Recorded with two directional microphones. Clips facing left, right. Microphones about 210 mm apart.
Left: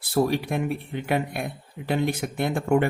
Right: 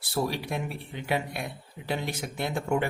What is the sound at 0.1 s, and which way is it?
A man's voice, 55° left (ahead or behind).